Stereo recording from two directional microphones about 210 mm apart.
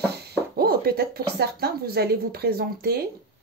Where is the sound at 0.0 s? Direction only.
50° right (ahead or behind).